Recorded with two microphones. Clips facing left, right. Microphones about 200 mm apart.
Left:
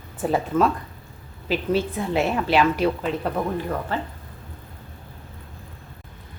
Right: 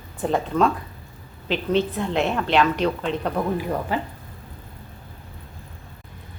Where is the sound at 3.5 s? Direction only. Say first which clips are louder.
Right 2 dB; 10° right (ahead or behind).